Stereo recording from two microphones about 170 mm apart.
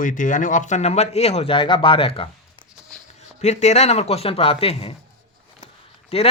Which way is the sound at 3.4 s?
40° left (ahead or behind).